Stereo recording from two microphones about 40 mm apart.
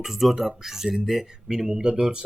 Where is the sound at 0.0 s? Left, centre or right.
Centre.